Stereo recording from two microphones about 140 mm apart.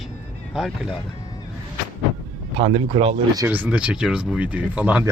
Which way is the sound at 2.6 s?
40° right (ahead or behind).